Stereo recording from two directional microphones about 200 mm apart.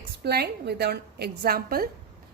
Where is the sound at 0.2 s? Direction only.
50° right (ahead or behind).